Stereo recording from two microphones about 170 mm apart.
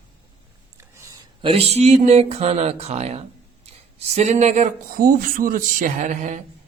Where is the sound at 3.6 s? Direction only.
40° right (ahead or behind).